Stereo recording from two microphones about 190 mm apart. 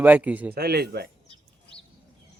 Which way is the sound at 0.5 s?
55° right (ahead or behind).